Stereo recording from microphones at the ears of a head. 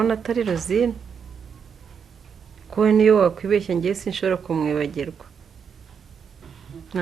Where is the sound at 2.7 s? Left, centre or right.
Right.